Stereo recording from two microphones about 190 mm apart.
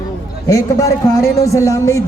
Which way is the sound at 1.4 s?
15° left (ahead or behind).